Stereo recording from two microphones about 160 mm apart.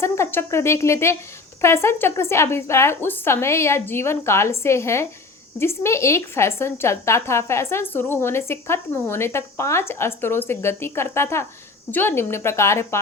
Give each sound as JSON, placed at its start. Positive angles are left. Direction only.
{"t": 0.0, "sound": "a woman's voice", "side_deg": 15}